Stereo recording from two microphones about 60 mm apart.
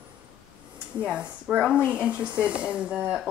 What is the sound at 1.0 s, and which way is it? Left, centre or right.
Speech, centre.